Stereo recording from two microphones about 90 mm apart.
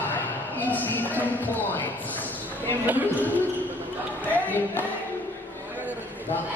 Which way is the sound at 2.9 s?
20° right (ahead or behind).